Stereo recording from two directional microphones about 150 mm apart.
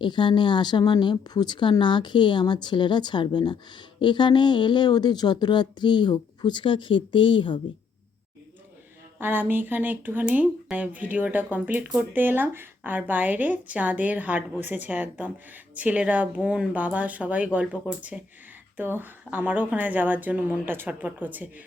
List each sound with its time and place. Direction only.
0.0 s speech: 30° left (ahead or behind)
9.1 s speech: 15° right (ahead or behind)